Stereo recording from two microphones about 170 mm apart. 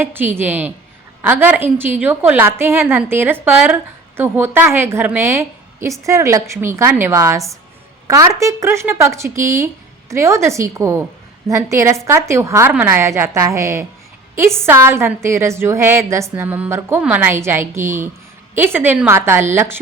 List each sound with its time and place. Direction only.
0.0 s a woman's voice: 10° right (ahead or behind)